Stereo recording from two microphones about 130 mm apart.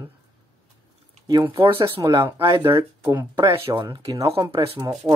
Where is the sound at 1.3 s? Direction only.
25° right (ahead or behind).